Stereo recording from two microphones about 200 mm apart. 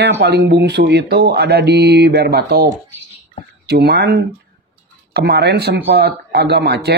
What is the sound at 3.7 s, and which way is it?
Speech, 55° right (ahead or behind).